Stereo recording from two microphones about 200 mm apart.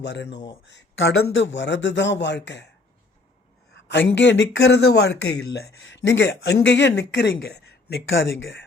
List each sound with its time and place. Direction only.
0.0 s speech: 60° left (ahead or behind)
0.6 s speech: 70° left (ahead or behind)
3.8 s speech: 65° left (ahead or behind)
5.8 s speech: 65° left (ahead or behind)